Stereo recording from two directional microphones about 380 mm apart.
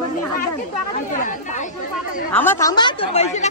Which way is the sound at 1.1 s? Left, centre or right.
Centre.